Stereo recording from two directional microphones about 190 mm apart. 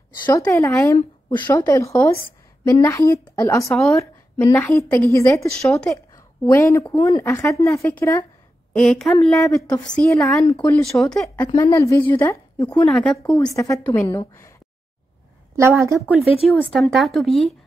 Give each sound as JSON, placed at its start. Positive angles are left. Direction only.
{"t": 0.2, "sound": "a woman's voice", "side_deg": 20}
{"t": 5.5, "sound": "speech", "side_deg": 5}
{"t": 6.4, "sound": "a woman's voice", "side_deg": 15}
{"t": 10.4, "sound": "speech", "side_deg": 25}
{"t": 10.7, "sound": "speech", "side_deg": 0}
{"t": 11.4, "sound": "a woman's voice", "side_deg": 15}
{"t": 12.9, "sound": "speech", "side_deg": 0}
{"t": 13.4, "sound": "a woman's voice", "side_deg": 15}
{"t": 15.5, "sound": "a woman's voice", "side_deg": -15}
{"t": 16.0, "sound": "speech", "side_deg": 0}